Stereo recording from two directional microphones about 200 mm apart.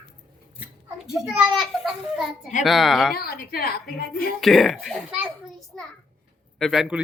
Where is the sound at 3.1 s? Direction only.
50° left (ahead or behind).